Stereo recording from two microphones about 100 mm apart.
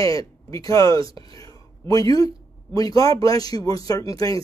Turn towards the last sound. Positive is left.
turn(degrees=35)  # may be behind; listen again after turning